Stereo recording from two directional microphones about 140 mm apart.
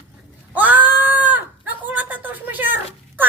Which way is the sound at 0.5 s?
10° right (ahead or behind).